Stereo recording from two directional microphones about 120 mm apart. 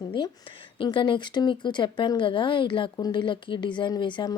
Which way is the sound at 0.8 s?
40° left (ahead or behind).